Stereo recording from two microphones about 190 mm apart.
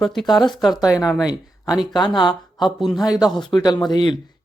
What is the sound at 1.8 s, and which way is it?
Speech, 25° left (ahead or behind).